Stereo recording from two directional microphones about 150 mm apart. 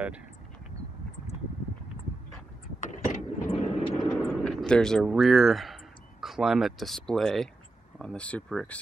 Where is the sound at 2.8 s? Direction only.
50° left (ahead or behind).